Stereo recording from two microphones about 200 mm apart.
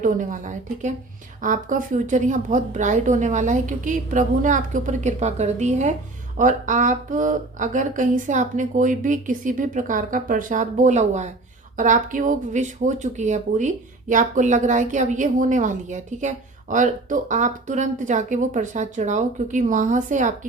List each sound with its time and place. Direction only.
0.0 s a woman's voice: 40° right (ahead or behind)